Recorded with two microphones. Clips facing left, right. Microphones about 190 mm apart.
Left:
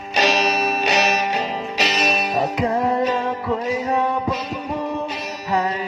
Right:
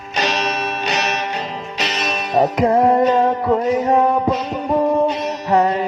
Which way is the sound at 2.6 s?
40° right (ahead or behind).